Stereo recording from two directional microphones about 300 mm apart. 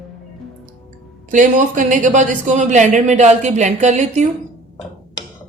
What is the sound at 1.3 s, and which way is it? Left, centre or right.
A woman's voice, right.